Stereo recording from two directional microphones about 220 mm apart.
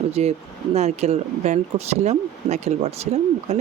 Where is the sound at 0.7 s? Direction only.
30° right (ahead or behind).